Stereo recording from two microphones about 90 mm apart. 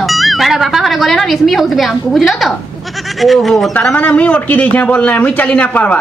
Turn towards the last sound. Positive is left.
turn(degrees=15)  # may be behind; listen again after turning